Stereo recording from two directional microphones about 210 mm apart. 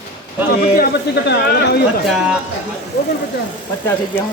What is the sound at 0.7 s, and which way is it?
Speech, 50° left (ahead or behind).